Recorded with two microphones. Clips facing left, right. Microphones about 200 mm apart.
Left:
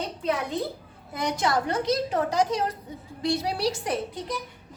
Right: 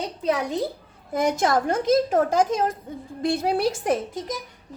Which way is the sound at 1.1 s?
50° right (ahead or behind).